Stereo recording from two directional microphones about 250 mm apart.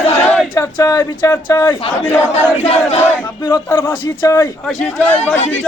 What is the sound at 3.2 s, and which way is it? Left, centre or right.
A man's voice, centre.